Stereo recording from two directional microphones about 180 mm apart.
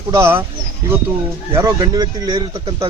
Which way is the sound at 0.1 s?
15° right (ahead or behind).